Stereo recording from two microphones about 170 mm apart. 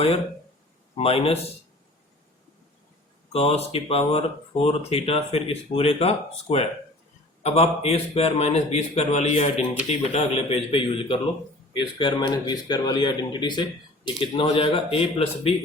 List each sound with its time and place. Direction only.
0.9 s speech: 35° left (ahead or behind)
3.3 s speech: 35° left (ahead or behind)